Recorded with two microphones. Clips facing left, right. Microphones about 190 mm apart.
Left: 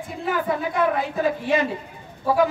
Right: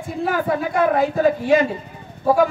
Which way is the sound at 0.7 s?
50° right (ahead or behind).